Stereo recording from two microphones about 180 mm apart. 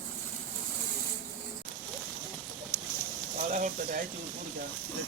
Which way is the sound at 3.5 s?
45° right (ahead or behind).